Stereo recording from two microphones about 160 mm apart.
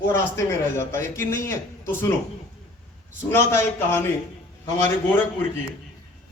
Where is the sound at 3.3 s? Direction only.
15° left (ahead or behind).